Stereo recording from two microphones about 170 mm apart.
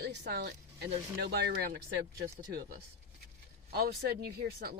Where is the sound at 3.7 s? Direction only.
65° right (ahead or behind).